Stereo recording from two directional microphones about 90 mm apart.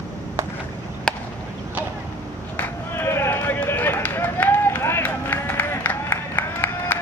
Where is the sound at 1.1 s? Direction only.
10° left (ahead or behind).